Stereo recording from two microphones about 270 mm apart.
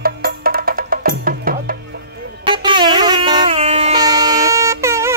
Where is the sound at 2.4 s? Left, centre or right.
Centre.